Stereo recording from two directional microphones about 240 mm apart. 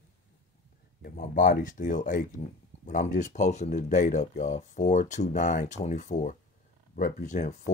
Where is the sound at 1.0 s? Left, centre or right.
Left.